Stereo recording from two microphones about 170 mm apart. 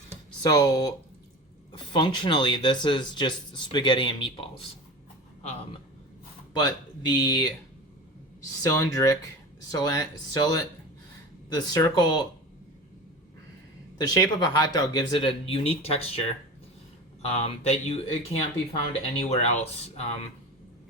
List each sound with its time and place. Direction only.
0.4 s speech: 20° left (ahead or behind); by 5.8 s 40° left (ahead or behind)
6.5 s speech: 25° left (ahead or behind)
8.6 s speech: 20° left (ahead or behind)
14.0 s speech: 25° left (ahead or behind)
17.2 s speech: 40° left (ahead or behind)